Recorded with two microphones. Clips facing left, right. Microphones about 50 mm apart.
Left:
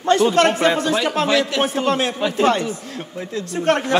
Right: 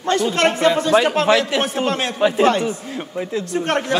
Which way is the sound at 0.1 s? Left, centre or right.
Left.